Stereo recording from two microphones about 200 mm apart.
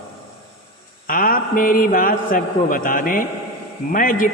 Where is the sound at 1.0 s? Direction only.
45° left (ahead or behind).